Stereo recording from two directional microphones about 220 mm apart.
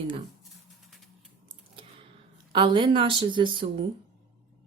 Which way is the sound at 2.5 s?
20° right (ahead or behind).